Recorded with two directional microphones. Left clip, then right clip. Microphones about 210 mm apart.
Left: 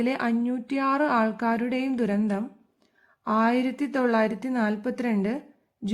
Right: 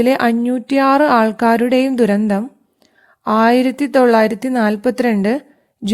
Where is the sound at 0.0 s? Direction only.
45° right (ahead or behind).